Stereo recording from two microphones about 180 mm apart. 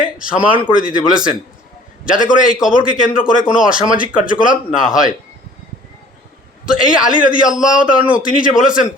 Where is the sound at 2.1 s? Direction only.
45° left (ahead or behind).